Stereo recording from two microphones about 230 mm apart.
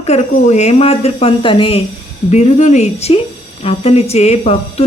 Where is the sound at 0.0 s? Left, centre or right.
Left.